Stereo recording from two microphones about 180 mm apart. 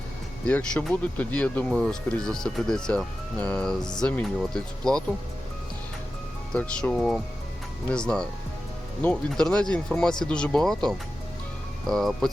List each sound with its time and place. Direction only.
0.4 s speech: 10° left (ahead or behind)
3.8 s speech: 25° left (ahead or behind)
4.0 s speech: 5° left (ahead or behind)
6.5 s speech: 5° left (ahead or behind)